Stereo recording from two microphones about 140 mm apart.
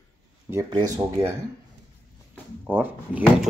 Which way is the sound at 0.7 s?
25° right (ahead or behind).